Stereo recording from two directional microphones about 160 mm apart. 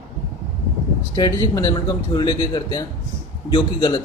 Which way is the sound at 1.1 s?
25° left (ahead or behind).